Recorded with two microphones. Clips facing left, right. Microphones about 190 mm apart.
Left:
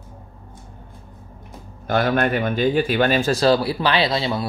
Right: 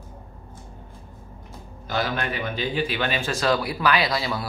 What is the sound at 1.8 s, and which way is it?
Speech, 55° left (ahead or behind).